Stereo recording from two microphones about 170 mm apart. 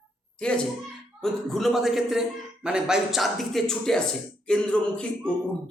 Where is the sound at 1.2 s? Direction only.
Centre (ahead or behind).